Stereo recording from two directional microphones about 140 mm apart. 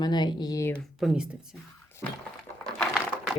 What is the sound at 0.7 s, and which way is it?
Speech, centre (ahead or behind).